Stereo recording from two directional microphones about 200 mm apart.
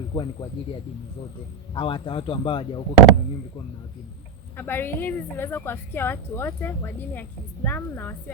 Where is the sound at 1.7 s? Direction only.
25° left (ahead or behind).